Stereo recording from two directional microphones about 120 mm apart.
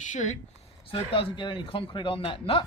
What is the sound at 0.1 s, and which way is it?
Speech, 80° left.